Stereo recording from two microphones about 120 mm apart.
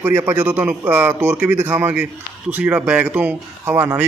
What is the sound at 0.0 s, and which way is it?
Speech, 15° right (ahead or behind).